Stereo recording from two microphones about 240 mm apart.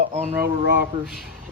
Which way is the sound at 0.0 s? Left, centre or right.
Right.